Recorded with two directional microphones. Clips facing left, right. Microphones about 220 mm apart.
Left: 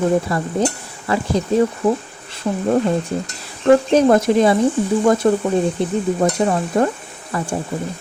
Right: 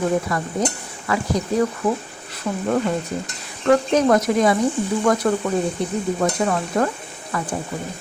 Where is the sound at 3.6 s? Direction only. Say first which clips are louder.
Left 4 dB; 30° left (ahead or behind).